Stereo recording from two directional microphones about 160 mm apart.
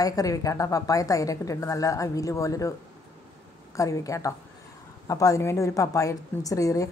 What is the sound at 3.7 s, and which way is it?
Speech, 20° left (ahead or behind).